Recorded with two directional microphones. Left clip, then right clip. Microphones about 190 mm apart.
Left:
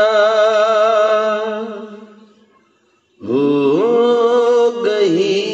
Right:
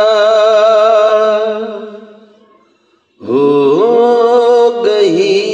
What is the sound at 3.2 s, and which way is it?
Mantra, 35° right (ahead or behind).